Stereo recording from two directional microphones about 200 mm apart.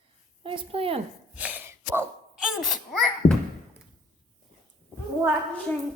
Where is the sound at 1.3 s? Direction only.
5° right (ahead or behind).